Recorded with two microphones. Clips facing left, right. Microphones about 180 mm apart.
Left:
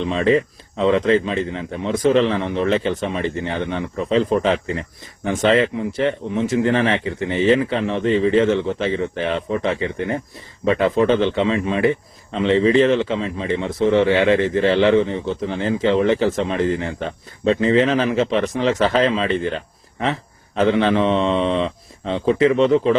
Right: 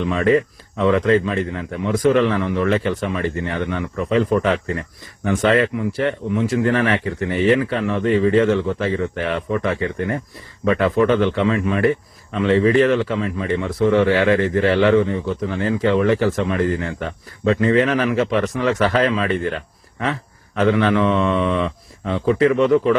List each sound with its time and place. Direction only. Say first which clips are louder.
0.0 s a man's voice: right 1 dB; 25° left (ahead or behind)